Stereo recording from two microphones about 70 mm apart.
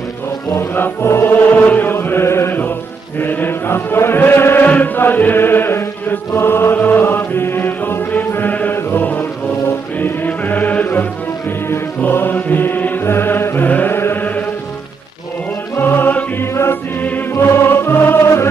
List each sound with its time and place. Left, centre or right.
0.5 s music: left
3.2 s chant: left
8.7 s music: left
12.0 s mantra: left
13.7 s chant: left
13.9 s mantra: left
15.7 s music: left